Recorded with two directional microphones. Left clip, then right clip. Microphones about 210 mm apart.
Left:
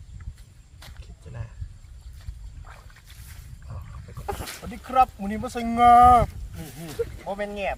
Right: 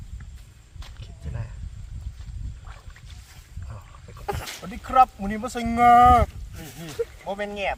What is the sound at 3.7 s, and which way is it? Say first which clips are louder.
Dog: even; 5° right (ahead or behind).